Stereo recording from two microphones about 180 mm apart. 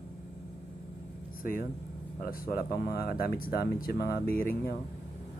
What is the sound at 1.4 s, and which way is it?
Speech, 50° left (ahead or behind).